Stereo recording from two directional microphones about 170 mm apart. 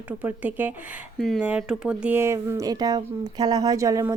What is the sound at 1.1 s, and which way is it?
Speech, centre (ahead or behind).